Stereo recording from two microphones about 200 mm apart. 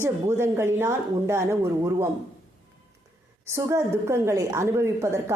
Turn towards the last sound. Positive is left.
turn(degrees=-15)  # may be behind; listen again after turning